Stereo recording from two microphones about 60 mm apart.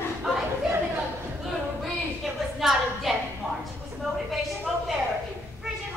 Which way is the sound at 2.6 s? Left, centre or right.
Centre.